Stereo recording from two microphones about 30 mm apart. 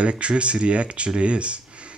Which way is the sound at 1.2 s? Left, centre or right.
Right.